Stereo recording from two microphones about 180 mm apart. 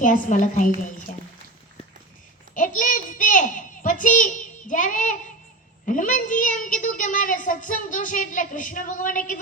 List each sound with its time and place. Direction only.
0.0 s a child's voice: 45° left (ahead or behind)
0.8 s a sound: 45° left (ahead or behind)
2.6 s child singing: 45° left (ahead or behind)
5.8 s a child's voice: 45° left (ahead or behind)